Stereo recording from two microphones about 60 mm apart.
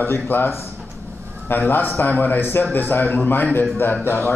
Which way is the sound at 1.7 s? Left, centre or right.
Left.